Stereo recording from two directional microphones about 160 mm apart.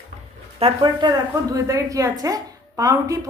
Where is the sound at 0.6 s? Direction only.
40° right (ahead or behind).